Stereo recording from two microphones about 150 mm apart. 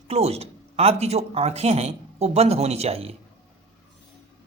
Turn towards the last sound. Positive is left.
turn(degrees=-45)  # may be behind; listen again after turning